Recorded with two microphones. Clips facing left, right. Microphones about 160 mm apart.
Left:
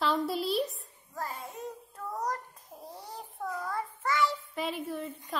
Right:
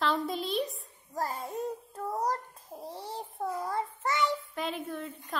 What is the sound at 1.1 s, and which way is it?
Child singing, 40° right (ahead or behind).